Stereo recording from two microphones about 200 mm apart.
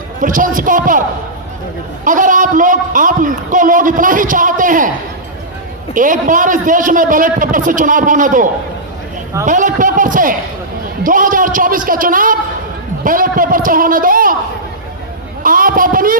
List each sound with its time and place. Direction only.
0.2 s a man's voice: 40° right (ahead or behind)
2.0 s a man's voice: 40° right (ahead or behind)
5.9 s a man's voice: 40° right (ahead or behind)
9.5 s a man's voice: 40° right (ahead or behind)
15.4 s a man's voice: 45° right (ahead or behind)